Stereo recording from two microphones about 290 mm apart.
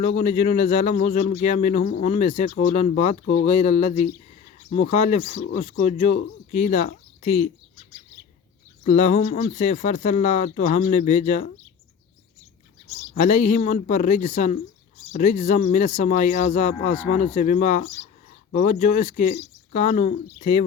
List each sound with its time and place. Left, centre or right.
0.0 s speech: left
8.8 s speech: left
12.9 s speech: left